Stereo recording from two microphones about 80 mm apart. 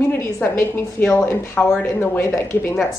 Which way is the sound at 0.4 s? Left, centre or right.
Left.